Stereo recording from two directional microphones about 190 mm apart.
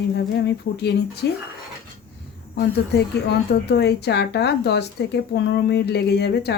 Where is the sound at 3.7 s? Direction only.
60° left (ahead or behind).